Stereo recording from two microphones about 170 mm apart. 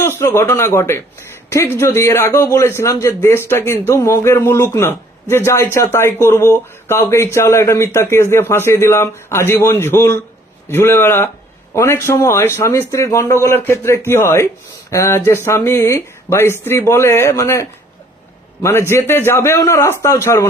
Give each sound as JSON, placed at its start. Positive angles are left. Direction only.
{"t": 0.2, "sound": "speech", "side_deg": 15}